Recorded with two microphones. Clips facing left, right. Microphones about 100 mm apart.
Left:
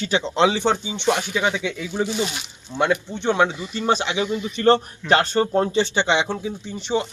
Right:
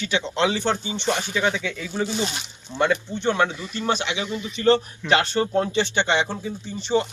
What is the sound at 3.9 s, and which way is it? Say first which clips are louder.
Speech: left 4 dB; 35° left (ahead or behind).